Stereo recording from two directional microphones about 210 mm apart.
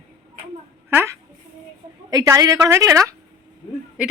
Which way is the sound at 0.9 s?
10° right (ahead or behind).